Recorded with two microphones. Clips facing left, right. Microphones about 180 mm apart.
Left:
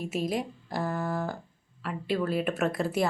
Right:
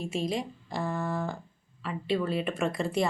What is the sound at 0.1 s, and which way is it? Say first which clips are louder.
Speech: left 2 dB; 5° left (ahead or behind).